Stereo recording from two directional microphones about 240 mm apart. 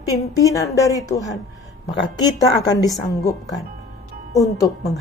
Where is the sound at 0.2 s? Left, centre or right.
Centre.